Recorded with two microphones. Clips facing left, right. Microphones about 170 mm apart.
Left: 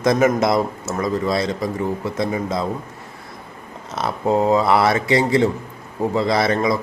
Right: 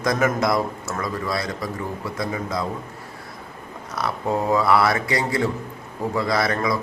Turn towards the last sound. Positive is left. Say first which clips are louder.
# left 4 dB
turn(degrees=20)  # may be behind; listen again after turning